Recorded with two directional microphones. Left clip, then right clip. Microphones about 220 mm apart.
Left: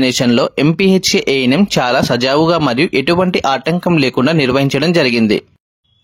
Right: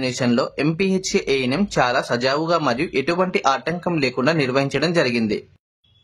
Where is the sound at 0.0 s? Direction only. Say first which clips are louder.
Left 8 dB; 40° left (ahead or behind).